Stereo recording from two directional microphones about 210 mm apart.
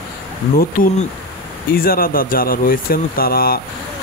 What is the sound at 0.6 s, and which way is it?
Speech, 40° left (ahead or behind).